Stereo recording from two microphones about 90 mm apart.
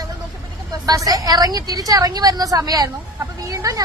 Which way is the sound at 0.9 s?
45° right (ahead or behind).